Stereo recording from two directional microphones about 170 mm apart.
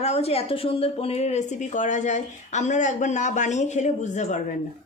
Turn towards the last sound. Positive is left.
turn(degrees=45)  # may be behind; listen again after turning